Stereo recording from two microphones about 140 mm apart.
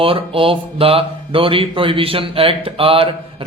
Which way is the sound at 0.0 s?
40° right (ahead or behind).